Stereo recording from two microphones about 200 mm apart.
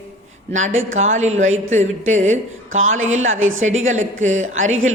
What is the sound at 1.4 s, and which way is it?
A man's voice, 75° right (ahead or behind).